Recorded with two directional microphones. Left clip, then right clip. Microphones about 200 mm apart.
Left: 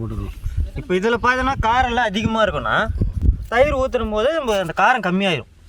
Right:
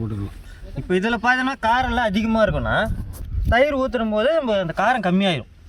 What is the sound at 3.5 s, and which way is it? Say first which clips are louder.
Speech: left 1 dB; 25° left (ahead or behind).